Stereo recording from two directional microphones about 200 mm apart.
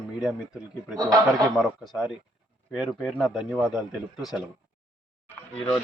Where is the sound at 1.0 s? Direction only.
15° right (ahead or behind).